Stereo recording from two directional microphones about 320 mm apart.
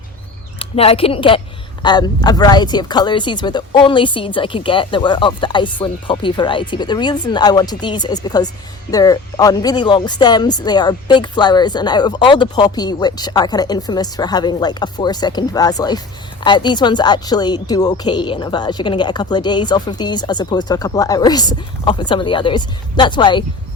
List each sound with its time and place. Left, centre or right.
0.6 s speech: centre